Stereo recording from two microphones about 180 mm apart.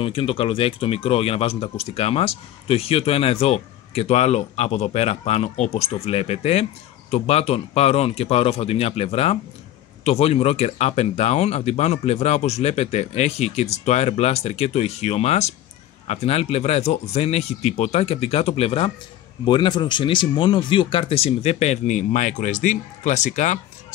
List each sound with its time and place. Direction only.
0.0 s speech: 30° left (ahead or behind)